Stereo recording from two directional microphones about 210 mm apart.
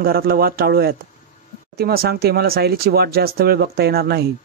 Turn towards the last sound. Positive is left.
turn(degrees=-50)  # may be behind; listen again after turning